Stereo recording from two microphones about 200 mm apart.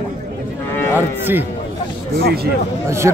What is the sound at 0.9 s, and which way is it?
Speech, 10° right (ahead or behind).